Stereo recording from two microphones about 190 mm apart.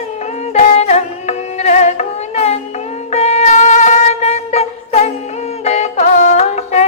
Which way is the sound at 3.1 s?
35° left (ahead or behind).